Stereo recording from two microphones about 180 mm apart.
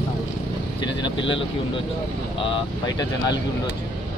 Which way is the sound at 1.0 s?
30° left (ahead or behind).